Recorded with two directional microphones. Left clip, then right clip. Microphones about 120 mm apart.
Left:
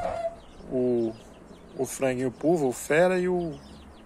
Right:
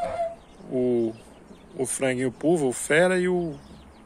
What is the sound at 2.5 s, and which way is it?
Speech, 45° right (ahead or behind).